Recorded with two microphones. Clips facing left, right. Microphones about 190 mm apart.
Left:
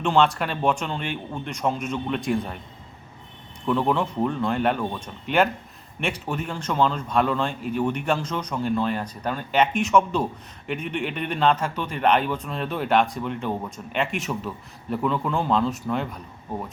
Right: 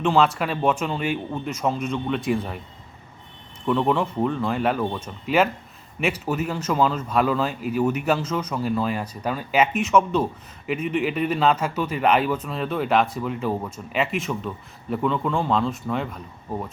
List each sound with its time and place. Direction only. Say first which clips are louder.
0.0 s a man's voice: right 1 dB; centre (ahead or behind)
3.7 s a man's voice: right 1 dB; centre (ahead or behind)